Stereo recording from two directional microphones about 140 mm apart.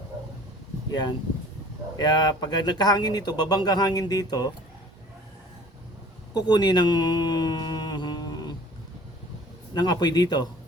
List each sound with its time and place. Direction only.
0.9 s speech: 30° left (ahead or behind)
6.3 s speech: 30° left (ahead or behind)
9.7 s speech: 30° left (ahead or behind)